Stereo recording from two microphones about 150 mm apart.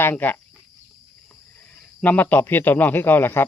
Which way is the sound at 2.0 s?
10° left (ahead or behind).